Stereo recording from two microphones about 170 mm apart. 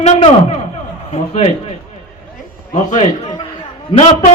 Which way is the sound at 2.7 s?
45° left (ahead or behind).